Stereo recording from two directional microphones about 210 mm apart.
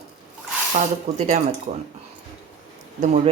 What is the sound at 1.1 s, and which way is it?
Speech, 35° right (ahead or behind).